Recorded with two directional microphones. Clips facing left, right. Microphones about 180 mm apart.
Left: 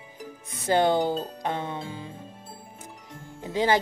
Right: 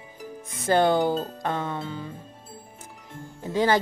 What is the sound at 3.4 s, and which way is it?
Speech, 15° left (ahead or behind).